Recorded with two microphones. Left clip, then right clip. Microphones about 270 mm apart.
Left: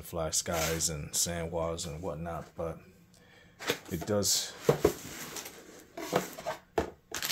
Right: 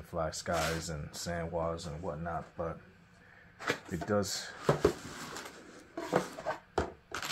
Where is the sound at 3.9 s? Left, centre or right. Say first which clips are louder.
Left 5 dB; left.